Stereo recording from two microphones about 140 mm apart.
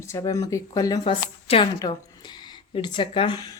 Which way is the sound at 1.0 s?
40° left (ahead or behind).